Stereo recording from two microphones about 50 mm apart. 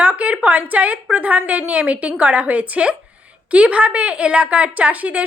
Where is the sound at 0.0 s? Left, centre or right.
Right.